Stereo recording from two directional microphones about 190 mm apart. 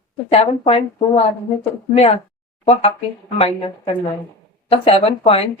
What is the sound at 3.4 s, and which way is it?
Speech, 30° left (ahead or behind).